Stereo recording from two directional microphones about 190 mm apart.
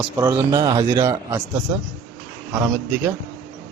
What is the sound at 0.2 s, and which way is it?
A man's voice, 20° right (ahead or behind).